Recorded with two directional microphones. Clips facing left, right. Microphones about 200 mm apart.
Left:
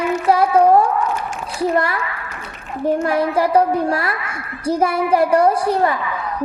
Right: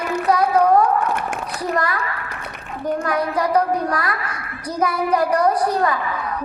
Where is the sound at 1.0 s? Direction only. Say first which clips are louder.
Even; 60° right (ahead or behind).